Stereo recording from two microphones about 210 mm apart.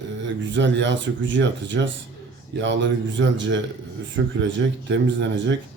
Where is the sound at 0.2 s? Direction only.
60° right (ahead or behind).